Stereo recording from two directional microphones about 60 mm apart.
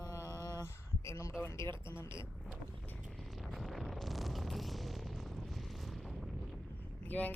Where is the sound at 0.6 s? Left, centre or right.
Left.